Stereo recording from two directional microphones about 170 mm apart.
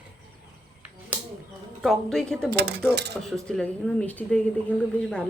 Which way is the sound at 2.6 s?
80° right.